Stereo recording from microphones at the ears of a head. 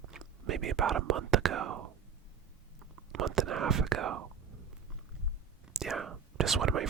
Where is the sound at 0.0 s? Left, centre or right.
Right.